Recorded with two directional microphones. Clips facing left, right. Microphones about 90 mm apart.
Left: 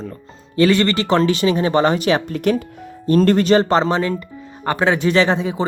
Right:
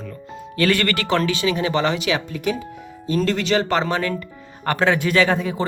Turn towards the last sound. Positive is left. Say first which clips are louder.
# left 2 dB
turn(degrees=20)  # may be behind; listen again after turning